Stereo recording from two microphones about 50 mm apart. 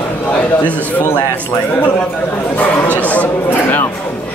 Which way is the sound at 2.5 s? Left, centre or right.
Left.